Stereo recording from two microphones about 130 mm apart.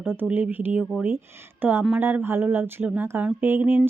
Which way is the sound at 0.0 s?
15° right (ahead or behind).